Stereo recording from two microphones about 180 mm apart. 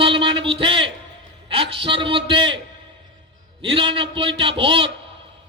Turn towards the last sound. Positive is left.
turn(degrees=-30)  # may be behind; listen again after turning